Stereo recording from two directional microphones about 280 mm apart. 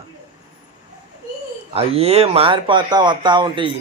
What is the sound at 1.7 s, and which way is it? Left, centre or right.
Speech, right.